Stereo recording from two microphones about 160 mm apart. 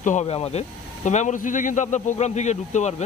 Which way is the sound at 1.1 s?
50° left (ahead or behind).